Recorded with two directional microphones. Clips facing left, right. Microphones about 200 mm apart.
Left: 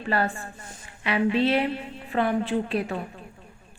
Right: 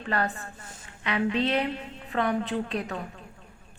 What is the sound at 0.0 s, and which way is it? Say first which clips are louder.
A woman's voice: left 3 dB; 10° left (ahead or behind).